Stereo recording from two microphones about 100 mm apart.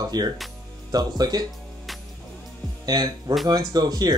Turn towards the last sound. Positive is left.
turn(degrees=-40)  # may be behind; listen again after turning